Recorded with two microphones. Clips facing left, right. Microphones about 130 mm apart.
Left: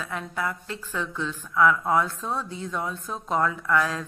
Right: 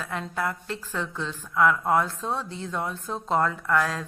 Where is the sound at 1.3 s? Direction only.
20° right (ahead or behind).